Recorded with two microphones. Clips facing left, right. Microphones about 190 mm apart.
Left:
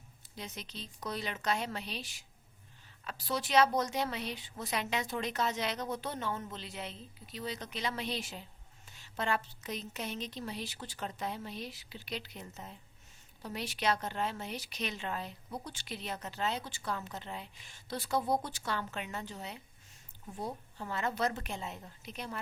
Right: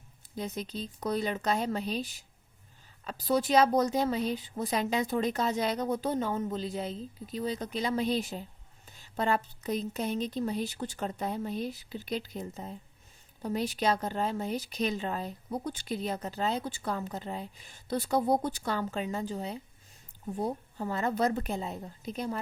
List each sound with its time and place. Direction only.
0.3 s a woman's voice: 40° right (ahead or behind)
3.0 s a woman's voice: 40° right (ahead or behind)